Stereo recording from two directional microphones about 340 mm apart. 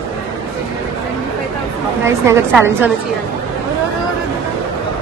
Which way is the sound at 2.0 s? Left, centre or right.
Centre.